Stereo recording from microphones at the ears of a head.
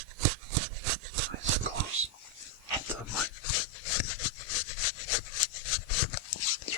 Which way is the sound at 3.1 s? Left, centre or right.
Left.